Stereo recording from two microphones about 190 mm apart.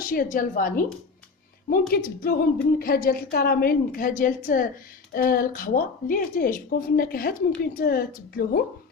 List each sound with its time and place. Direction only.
0.0 s a woman's voice: 45° left (ahead or behind)
1.9 s a woman's voice: 50° left (ahead or behind)